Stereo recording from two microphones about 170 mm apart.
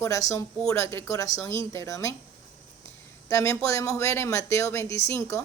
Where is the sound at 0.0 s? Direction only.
20° left (ahead or behind).